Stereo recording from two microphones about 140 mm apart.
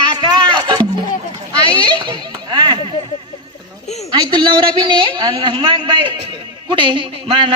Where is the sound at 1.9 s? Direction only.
35° right (ahead or behind).